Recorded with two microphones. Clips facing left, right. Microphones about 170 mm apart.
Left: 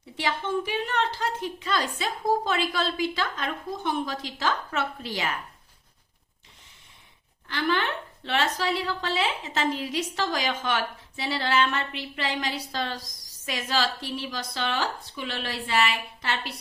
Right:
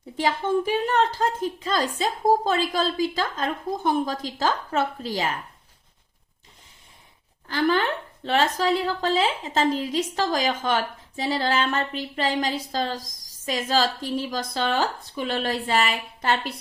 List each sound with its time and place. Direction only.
0.2 s a woman's voice: 45° right (ahead or behind)
7.4 s a woman's voice: 40° right (ahead or behind)
9.6 s a woman's voice: 30° right (ahead or behind)
9.9 s a woman's voice: 40° right (ahead or behind)